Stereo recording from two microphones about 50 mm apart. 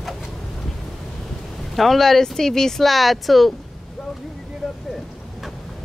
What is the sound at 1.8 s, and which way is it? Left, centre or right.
Speech, centre.